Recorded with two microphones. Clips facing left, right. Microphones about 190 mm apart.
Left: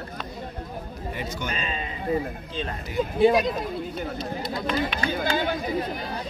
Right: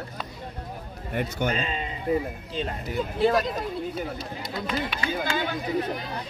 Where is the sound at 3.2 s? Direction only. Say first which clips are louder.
Left 3 dB; 15° left (ahead or behind).